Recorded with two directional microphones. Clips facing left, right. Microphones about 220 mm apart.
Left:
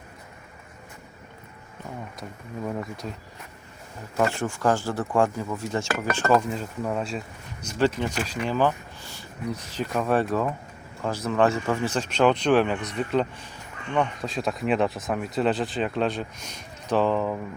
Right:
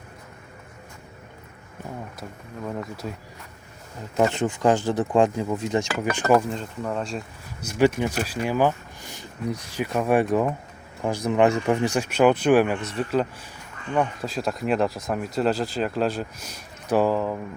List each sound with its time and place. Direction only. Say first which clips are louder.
2.6 s speech: right 1 dB; centre (ahead or behind)
4.2 s speech: right 3 dB; 20° right (ahead or behind)
6.5 s speech: even; 5° left (ahead or behind)
7.6 s speech: right 3 dB; 10° right (ahead or behind)